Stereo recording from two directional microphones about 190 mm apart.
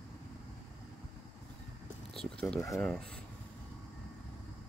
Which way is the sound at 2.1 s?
5° left (ahead or behind).